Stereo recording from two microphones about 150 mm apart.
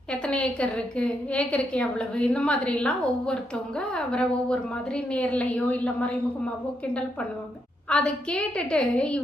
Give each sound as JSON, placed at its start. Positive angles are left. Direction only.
{"t": 0.1, "sound": "a woman's voice", "side_deg": 10}
{"t": 7.9, "sound": "a woman's voice", "side_deg": 5}